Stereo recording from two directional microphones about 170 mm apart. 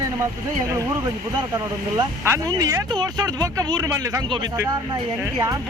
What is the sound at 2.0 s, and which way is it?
Speech, 25° right (ahead or behind).